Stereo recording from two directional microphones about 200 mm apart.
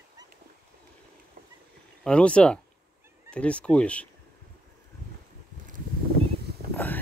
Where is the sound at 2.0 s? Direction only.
5° left (ahead or behind).